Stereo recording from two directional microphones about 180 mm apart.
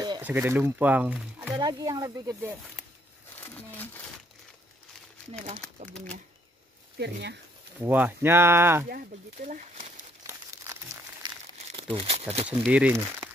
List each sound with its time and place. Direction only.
0.2 s speech: 10° right (ahead or behind)
1.5 s speech: 20° right (ahead or behind)
3.3 s speech: 10° left (ahead or behind)
5.9 s speech: 5° left (ahead or behind)
7.0 s speech: 70° right (ahead or behind)
7.8 s speech: 10° right (ahead or behind)
8.8 s speech: 55° right (ahead or behind)
10.2 s crumpling: 15° right (ahead or behind)
11.2 s crumpling: 25° right (ahead or behind)
12.4 s speech: 5° right (ahead or behind)